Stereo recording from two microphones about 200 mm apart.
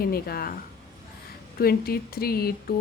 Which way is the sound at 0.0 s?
50° left (ahead or behind).